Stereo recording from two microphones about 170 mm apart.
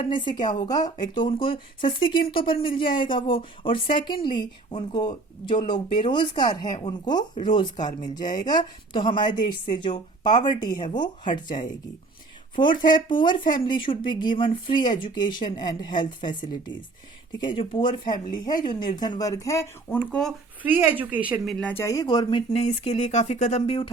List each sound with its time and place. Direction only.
0.0 s speech: 30° left (ahead or behind)
8.2 s speech: 50° left (ahead or behind)
8.4 s speech: 25° left (ahead or behind)
11.4 s speech: 50° left (ahead or behind)
12.6 s speech: 25° left (ahead or behind)
20.6 s a woman's voice: 10° right (ahead or behind)
21.5 s speech: 10° left (ahead or behind); by 23.9 s 30° left (ahead or behind)